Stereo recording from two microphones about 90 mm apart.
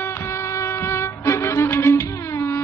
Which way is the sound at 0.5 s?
30° left (ahead or behind).